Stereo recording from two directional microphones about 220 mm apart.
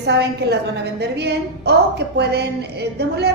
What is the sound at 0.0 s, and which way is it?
A woman's voice, 50° right (ahead or behind).